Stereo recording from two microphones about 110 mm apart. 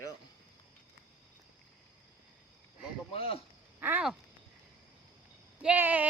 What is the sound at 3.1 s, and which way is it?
Speech, 60° left (ahead or behind).